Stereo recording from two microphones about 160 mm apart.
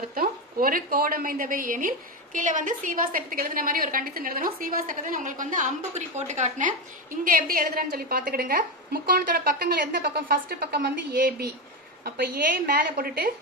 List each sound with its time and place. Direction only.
0.1 s a woman's voice: 65° right (ahead or behind); by 6.7 s 50° right (ahead or behind)
7.2 s a woman's voice: 65° right (ahead or behind)